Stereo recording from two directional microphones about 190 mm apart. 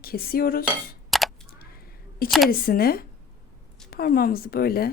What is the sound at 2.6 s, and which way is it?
Speech, 50° left (ahead or behind).